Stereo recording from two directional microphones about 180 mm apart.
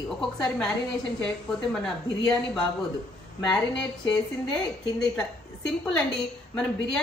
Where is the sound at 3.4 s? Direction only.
5° left (ahead or behind).